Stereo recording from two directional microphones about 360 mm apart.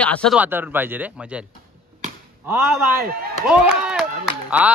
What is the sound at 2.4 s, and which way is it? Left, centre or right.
A man's voice, centre.